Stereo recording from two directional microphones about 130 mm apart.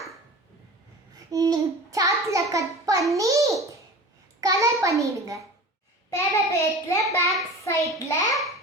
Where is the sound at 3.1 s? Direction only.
25° right (ahead or behind).